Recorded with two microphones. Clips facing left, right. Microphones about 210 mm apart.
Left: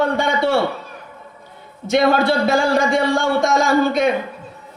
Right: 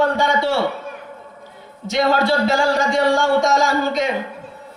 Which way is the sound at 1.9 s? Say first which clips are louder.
Left 2 dB; 55° left (ahead or behind).